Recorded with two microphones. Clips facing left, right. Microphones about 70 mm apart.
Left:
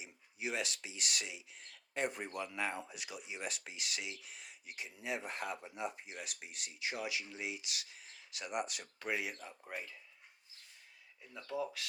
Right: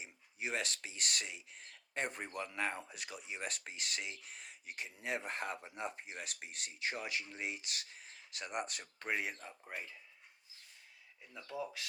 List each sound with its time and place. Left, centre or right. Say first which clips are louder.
0.0 s speech: left 1 dB; right
9.7 s speech: left 1 dB; right